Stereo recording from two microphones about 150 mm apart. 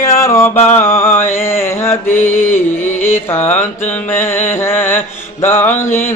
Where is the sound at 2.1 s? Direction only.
55° left (ahead or behind).